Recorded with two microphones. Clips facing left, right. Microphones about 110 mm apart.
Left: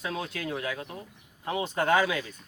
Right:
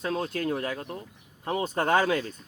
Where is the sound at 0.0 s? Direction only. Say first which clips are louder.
Right 5 dB; 40° right (ahead or behind).